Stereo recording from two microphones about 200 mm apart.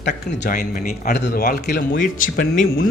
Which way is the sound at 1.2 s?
55° left (ahead or behind).